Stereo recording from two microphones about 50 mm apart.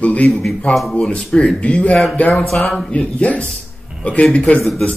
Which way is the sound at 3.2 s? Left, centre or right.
Left.